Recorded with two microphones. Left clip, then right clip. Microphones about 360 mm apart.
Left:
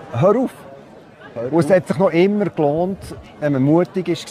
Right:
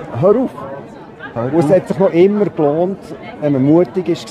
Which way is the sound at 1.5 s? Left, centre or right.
Left.